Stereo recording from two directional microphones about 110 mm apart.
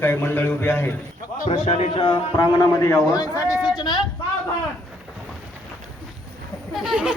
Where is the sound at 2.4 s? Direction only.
35° left (ahead or behind).